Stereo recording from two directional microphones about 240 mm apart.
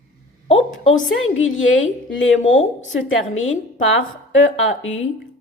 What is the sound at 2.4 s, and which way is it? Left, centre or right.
Speech, left.